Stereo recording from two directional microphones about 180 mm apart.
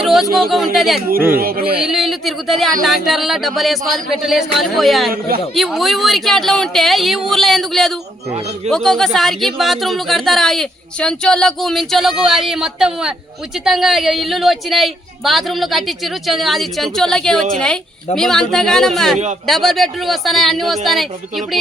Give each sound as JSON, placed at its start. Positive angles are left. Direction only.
{"t": 0.0, "sound": "speech", "side_deg": 0}
{"t": 1.4, "sound": "speech", "side_deg": -55}
{"t": 1.8, "sound": "speech", "side_deg": 0}